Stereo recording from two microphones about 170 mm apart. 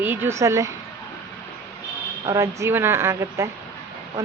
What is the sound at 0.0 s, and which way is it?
Speech, 10° right (ahead or behind).